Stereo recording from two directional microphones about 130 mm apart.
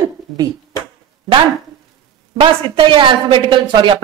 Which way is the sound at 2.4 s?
40° right (ahead or behind).